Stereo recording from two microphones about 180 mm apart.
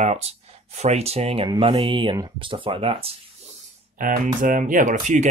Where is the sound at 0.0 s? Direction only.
35° right (ahead or behind).